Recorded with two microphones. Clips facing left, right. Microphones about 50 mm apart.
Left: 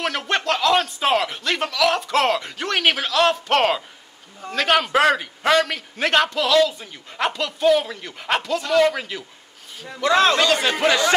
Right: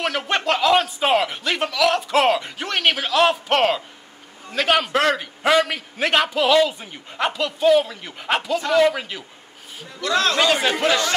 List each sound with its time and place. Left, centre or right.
0.5 s speech: centre
7.1 s speech: centre
9.9 s a man's voice: left
10.4 s speech: centre